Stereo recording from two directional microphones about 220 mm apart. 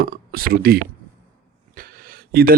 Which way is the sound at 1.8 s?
40° right (ahead or behind).